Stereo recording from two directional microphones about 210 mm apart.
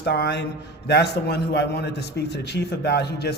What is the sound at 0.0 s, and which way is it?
A man's voice, 50° left (ahead or behind).